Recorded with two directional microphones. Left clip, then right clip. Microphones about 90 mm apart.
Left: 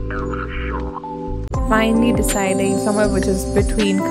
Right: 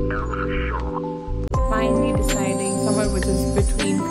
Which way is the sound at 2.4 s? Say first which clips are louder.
Left 5 dB; 55° left (ahead or behind).